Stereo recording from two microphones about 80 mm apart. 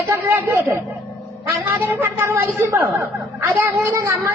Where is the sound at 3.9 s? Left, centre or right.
Right.